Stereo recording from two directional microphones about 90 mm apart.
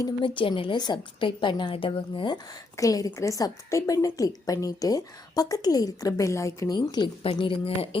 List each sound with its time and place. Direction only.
0.2 s a woman's voice: 70° left (ahead or behind)
2.7 s a woman's voice: 40° left (ahead or behind)
7.0 s a woman's voice: 60° left (ahead or behind)
7.3 s speech: 80° left